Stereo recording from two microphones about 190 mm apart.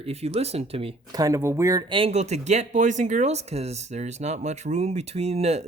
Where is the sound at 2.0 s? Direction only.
35° right (ahead or behind).